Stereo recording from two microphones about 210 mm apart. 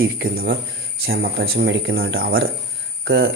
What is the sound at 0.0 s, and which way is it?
Speech, 50° right (ahead or behind).